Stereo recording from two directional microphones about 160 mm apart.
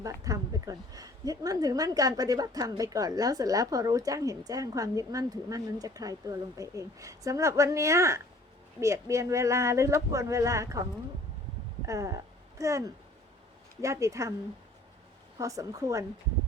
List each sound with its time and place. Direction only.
0.0 s speech: 20° right (ahead or behind)
11.9 s speech: 20° right (ahead or behind)
15.4 s speech: 20° right (ahead or behind)